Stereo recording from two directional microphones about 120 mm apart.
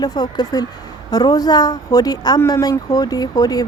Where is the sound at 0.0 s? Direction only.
35° left (ahead or behind).